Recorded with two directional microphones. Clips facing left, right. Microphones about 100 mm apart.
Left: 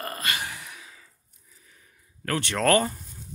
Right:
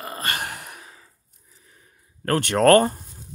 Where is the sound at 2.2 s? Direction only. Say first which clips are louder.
Right 7 dB; 45° right (ahead or behind).